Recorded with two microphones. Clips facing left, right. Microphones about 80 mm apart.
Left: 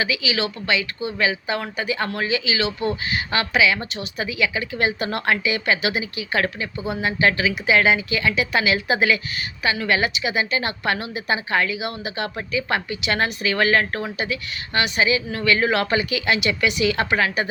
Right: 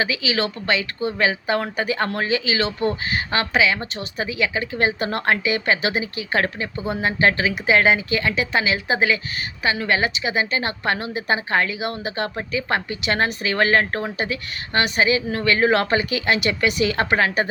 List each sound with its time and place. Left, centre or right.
0.0 s a woman's voice: right